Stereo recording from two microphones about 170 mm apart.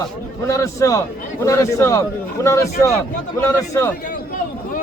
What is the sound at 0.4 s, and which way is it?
A man's voice, 20° left (ahead or behind).